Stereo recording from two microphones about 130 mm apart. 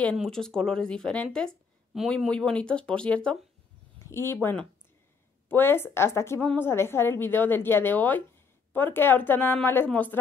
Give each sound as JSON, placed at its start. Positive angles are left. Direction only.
{"t": 0.0, "sound": "a woman's voice", "side_deg": 5}